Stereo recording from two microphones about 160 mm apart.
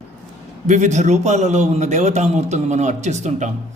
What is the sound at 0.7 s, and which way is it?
A man's voice, 45° right (ahead or behind).